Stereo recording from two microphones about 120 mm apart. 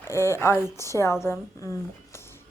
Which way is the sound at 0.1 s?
20° left (ahead or behind).